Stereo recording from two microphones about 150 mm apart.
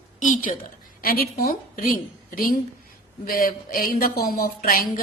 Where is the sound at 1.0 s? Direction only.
90° left.